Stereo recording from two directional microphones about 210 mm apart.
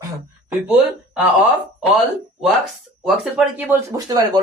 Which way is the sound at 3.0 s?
5° right (ahead or behind).